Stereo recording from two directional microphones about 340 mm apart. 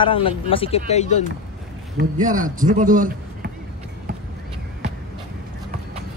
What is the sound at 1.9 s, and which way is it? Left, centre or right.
A man's voice, right.